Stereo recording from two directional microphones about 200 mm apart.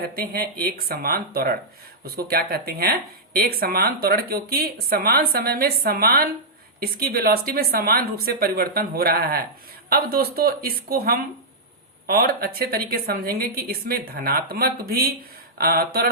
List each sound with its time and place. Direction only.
0.2 s speech: 50° right (ahead or behind)